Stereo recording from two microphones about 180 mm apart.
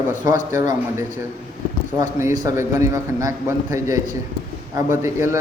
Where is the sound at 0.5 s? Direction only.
15° right (ahead or behind).